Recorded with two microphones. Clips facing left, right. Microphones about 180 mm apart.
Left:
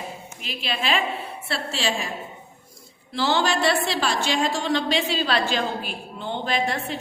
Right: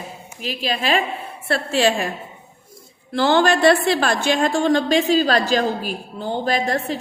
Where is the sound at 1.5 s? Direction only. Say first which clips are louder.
Right 9 dB; 55° right (ahead or behind).